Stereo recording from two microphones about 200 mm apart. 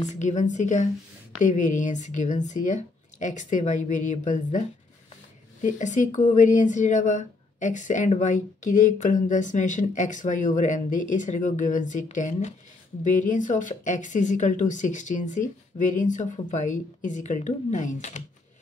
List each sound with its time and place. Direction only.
0.0 s speech: 35° left (ahead or behind)